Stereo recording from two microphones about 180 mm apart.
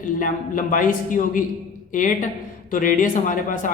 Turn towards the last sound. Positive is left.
turn(degrees=45)  # may be behind; listen again after turning